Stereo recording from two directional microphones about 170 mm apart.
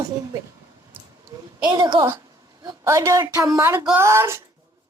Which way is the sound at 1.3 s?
15° right (ahead or behind).